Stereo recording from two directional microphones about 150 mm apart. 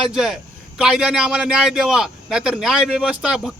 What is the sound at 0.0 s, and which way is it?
A man's voice, 5° right (ahead or behind).